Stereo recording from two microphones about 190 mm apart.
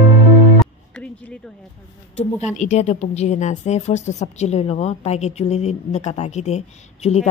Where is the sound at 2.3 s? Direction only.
35° left (ahead or behind).